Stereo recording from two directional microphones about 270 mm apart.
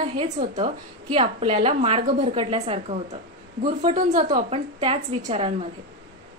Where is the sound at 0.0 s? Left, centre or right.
Right.